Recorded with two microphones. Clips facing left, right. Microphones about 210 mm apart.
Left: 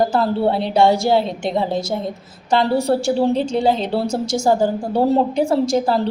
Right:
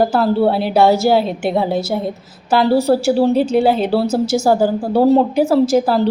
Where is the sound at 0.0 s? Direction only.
5° right (ahead or behind).